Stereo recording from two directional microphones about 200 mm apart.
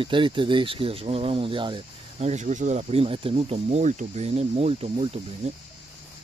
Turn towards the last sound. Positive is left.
turn(degrees=-30)  # may be behind; listen again after turning